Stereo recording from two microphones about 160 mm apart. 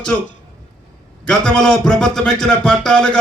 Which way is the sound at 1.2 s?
5° left (ahead or behind).